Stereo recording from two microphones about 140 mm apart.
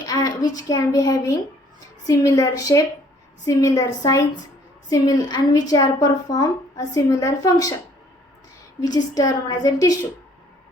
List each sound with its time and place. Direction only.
0.0 s a woman's voice: 25° left (ahead or behind)
8.8 s a woman's voice: 30° left (ahead or behind)